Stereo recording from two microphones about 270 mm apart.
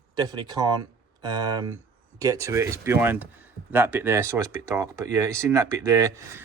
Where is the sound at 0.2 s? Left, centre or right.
Centre.